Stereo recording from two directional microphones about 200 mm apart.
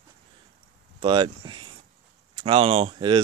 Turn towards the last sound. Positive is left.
turn(degrees=-25)  # may be behind; listen again after turning